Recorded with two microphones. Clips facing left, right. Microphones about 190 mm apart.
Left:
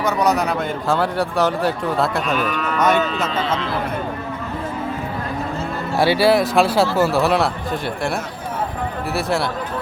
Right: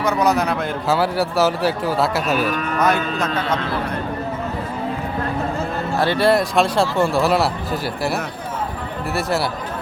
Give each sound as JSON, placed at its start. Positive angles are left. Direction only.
{"t": 0.0, "sound": "a man's voice", "side_deg": 0}
{"t": 2.5, "sound": "moo", "side_deg": -45}
{"t": 2.7, "sound": "a man's voice", "side_deg": 0}
{"t": 6.0, "sound": "a man's voice", "side_deg": 5}